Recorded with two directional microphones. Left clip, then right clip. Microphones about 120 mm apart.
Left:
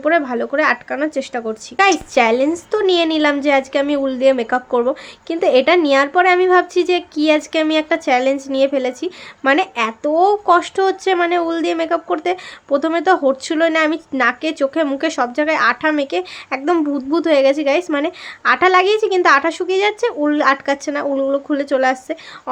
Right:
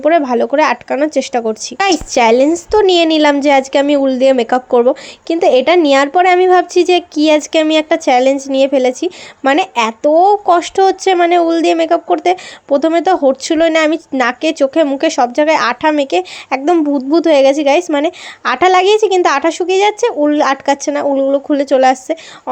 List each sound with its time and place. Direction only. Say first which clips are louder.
0.0 s a woman's voice: right 5 dB; 45° right (ahead or behind)